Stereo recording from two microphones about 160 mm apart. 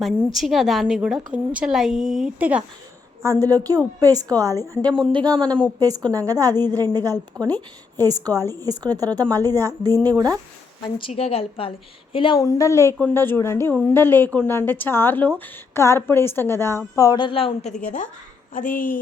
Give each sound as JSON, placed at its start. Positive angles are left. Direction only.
{"t": 0.2, "sound": "a woman's voice", "side_deg": 0}
{"t": 3.2, "sound": "a woman's voice", "side_deg": -20}
{"t": 4.8, "sound": "a woman's voice", "side_deg": 5}
{"t": 5.1, "sound": "a woman's voice", "side_deg": -25}
{"t": 5.5, "sound": "a woman's voice", "side_deg": 10}
{"t": 5.8, "sound": "a woman's voice", "side_deg": -25}
{"t": 10.8, "sound": "a woman's voice", "side_deg": 30}
{"t": 18.5, "sound": "speech", "side_deg": 55}